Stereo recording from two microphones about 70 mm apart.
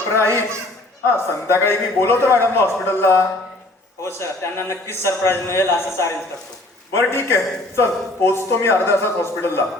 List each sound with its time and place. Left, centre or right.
0.1 s a man's voice: left